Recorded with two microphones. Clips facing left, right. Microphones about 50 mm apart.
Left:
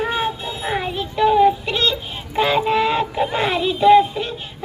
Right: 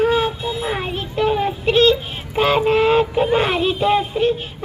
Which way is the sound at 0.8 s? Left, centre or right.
Right.